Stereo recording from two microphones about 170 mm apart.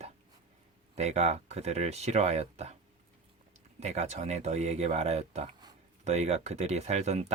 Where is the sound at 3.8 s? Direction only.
40° right (ahead or behind).